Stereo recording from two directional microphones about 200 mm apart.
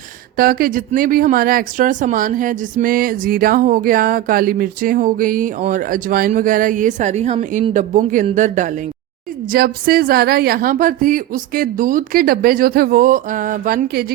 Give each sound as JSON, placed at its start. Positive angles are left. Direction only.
{"t": 0.3, "sound": "speech", "side_deg": -50}
{"t": 9.5, "sound": "speech", "side_deg": -50}